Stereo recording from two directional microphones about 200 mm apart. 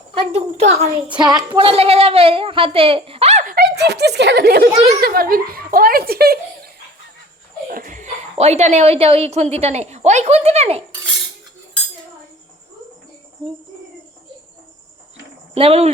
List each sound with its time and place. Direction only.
0.1 s a woman's voice: 30° right (ahead or behind)
1.2 s a woman's voice: 20° right (ahead or behind)
3.5 s speech: 55° right (ahead or behind)
7.7 s speech: 40° right (ahead or behind)
15.5 s a woman's voice: 30° right (ahead or behind)